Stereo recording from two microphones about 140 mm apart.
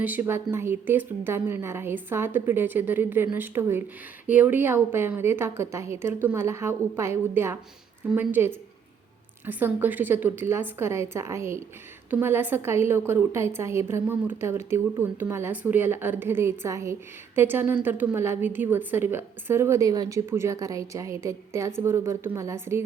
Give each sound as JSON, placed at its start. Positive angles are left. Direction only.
{"t": 0.0, "sound": "a woman's voice", "side_deg": -15}